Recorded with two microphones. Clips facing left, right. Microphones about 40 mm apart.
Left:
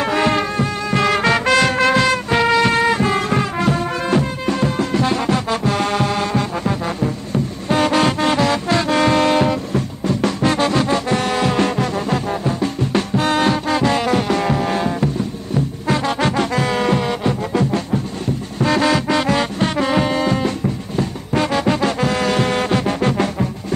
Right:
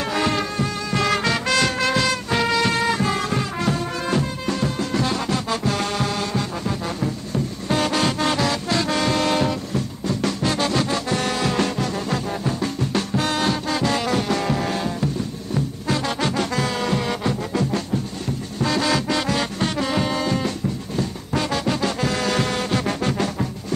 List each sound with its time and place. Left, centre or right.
0.0 s music: left
7.0 s music: centre